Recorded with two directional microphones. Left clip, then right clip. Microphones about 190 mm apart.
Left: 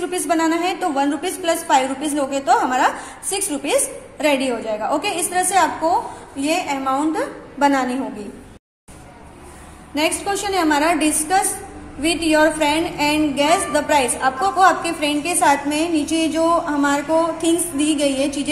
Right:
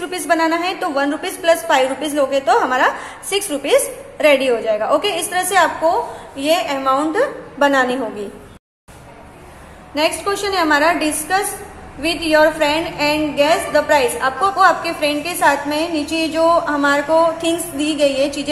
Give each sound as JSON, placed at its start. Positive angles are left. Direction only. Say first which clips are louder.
{"t": 0.0, "sound": "a woman's voice", "louder": "right 2 dB", "side_deg": 15}
{"t": 9.9, "sound": "a woman's voice", "louder": "right 2 dB", "side_deg": 20}